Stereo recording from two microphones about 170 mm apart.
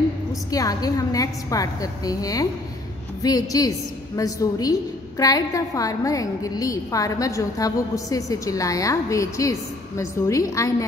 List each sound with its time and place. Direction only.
0.5 s a woman's voice: 20° left (ahead or behind)